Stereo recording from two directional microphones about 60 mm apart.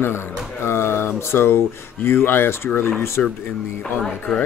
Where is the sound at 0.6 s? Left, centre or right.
Left.